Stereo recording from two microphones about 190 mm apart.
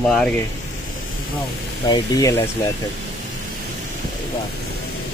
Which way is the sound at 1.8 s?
20° left (ahead or behind).